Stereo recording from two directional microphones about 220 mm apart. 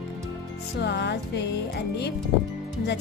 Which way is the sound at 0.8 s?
50° left (ahead or behind).